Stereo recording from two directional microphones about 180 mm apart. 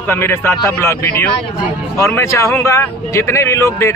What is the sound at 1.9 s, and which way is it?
Speech, 15° left (ahead or behind).